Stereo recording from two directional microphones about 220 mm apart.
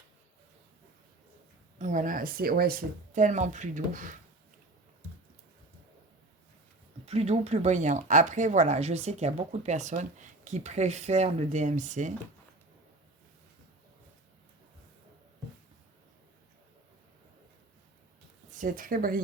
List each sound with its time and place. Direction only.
1.8 s speech: 35° right (ahead or behind)
7.0 s speech: 30° right (ahead or behind)
18.6 s speech: 40° right (ahead or behind)